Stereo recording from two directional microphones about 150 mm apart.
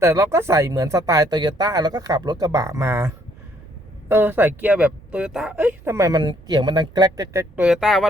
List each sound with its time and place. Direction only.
0.0 s speech: 20° right (ahead or behind)
4.1 s speech: 15° right (ahead or behind)
7.5 s speech: 5° right (ahead or behind)